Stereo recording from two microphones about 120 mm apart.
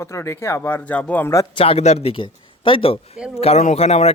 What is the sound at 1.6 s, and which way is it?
Speech, 55° left (ahead or behind).